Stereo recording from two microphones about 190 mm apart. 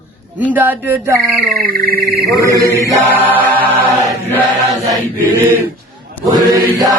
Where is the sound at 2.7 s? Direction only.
15° right (ahead or behind).